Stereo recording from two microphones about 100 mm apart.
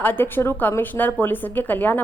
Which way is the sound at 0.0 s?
20° left (ahead or behind).